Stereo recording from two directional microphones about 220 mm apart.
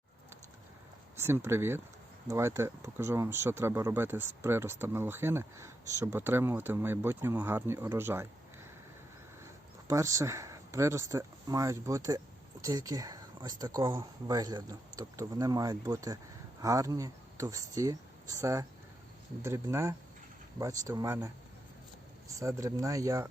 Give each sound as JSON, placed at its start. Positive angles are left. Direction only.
{"t": 1.1, "sound": "speech", "side_deg": -10}
{"t": 9.4, "sound": "speech", "side_deg": -15}
{"t": 22.4, "sound": "speech", "side_deg": -15}